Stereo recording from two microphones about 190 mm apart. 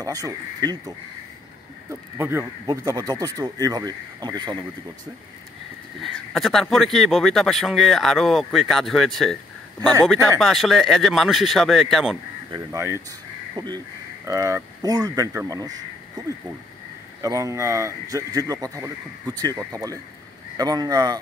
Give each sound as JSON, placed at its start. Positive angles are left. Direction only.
{"t": 0.0, "sound": "speech", "side_deg": -20}
{"t": 6.0, "sound": "speech", "side_deg": 0}
{"t": 12.5, "sound": "speech", "side_deg": -15}
{"t": 17.2, "sound": "speech", "side_deg": -15}